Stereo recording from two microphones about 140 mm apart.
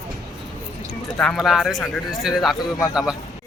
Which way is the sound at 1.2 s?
5° left (ahead or behind).